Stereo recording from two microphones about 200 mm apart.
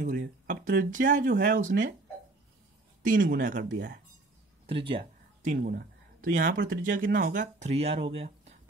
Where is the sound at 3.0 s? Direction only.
40° right (ahead or behind).